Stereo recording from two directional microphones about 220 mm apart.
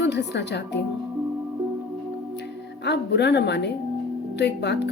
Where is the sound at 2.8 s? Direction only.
50° left (ahead or behind).